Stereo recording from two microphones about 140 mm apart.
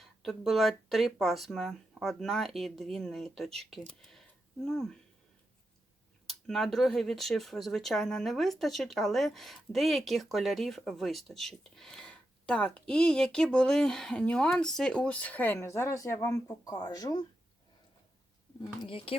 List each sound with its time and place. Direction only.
0.0 s speech: centre (ahead or behind)
6.2 s speech: centre (ahead or behind); by 17.2 s 25° left (ahead or behind)
18.8 s speech: 40° left (ahead or behind)